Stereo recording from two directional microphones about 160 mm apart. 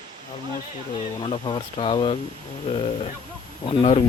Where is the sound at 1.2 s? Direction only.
30° left (ahead or behind).